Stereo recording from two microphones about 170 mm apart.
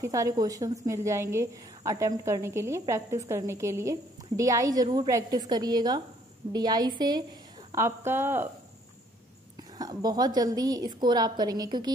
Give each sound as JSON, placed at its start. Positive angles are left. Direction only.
{"t": 0.0, "sound": "a woman's voice", "side_deg": -20}
{"t": 7.7, "sound": "a woman's voice", "side_deg": -15}
{"t": 9.6, "sound": "a woman's voice", "side_deg": -20}